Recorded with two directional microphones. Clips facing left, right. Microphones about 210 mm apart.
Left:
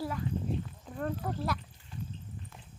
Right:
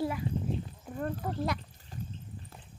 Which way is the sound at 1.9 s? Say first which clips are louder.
Even; 40° right (ahead or behind).